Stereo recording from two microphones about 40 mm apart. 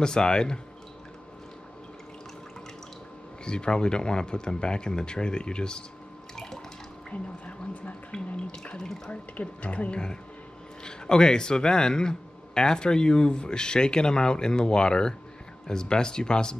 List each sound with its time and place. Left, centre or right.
0.0 s speech: left
3.4 s speech: left
6.3 s water: centre
7.1 s speech: left
8.7 s speech: centre
9.1 s speech: left